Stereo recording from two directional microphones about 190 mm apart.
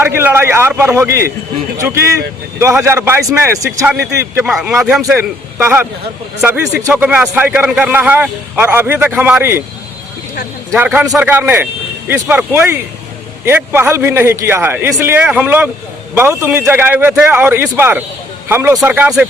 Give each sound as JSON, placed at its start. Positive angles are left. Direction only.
{"t": 0.0, "sound": "a man's voice", "side_deg": -10}
{"t": 4.4, "sound": "a man's voice", "side_deg": -5}
{"t": 10.8, "sound": "a man's voice", "side_deg": -5}